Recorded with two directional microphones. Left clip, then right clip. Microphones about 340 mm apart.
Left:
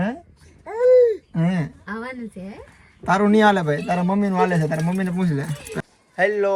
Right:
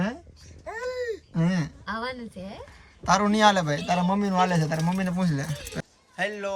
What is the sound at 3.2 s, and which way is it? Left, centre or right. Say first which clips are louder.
Speech: left 6 dB; centre.